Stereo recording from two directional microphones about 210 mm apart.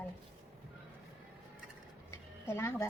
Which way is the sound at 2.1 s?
10° left (ahead or behind).